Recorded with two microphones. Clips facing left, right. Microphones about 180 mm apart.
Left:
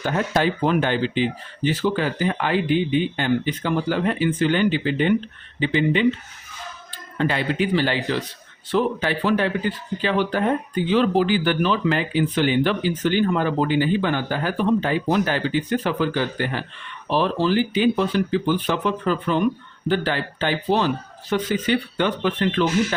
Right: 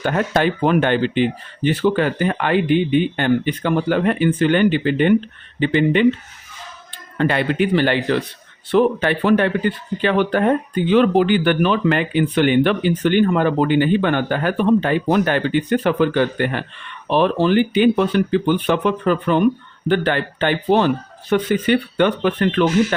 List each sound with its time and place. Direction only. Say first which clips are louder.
0.0 s speech: right 3 dB; 60° right (ahead or behind)
7.2 s speech: right 4 dB; 60° right (ahead or behind)